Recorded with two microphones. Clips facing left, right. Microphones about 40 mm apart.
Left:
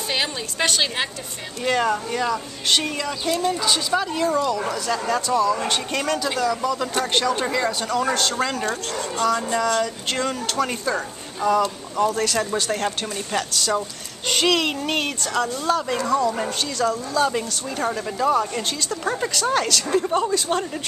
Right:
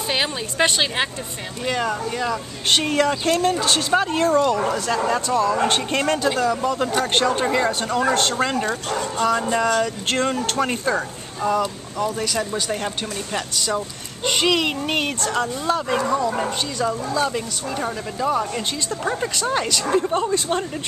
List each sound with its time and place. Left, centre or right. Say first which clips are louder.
0.1 s a child's voice: right 2 dB; centre
1.6 s speech: left 2 dB; centre
3.3 s speech: right 3 dB; right
3.9 s a child's voice: right 5 dB; right
10.0 s speech: right 3 dB; right
12.1 s speech: left 2 dB; centre
14.2 s a child's voice: right 1 dB; centre
15.2 s a child's voice: even; right
17.2 s a child's voice: left 1 dB; centre